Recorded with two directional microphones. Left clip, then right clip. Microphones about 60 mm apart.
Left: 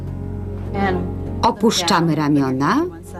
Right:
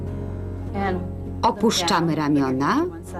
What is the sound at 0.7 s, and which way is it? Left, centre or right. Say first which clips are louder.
A woman's voice: left 5 dB; right.